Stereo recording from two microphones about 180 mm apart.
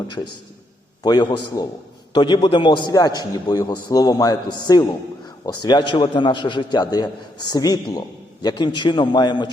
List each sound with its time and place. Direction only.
1.0 s a man's voice: 25° left (ahead or behind)